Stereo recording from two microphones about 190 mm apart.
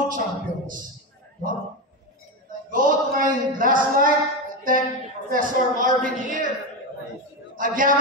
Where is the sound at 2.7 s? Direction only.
45° right (ahead or behind).